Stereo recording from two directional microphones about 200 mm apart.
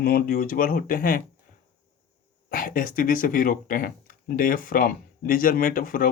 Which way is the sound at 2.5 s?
45° left (ahead or behind).